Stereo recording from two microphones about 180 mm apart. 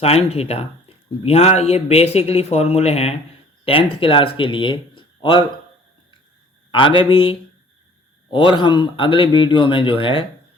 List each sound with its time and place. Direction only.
0.0 s speech: 35° left (ahead or behind)
6.7 s speech: 30° left (ahead or behind)